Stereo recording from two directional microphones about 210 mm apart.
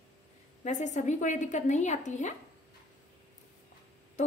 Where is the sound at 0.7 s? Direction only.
35° left (ahead or behind).